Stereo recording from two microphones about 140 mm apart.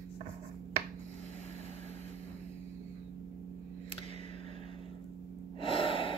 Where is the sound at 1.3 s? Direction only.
55° right (ahead or behind).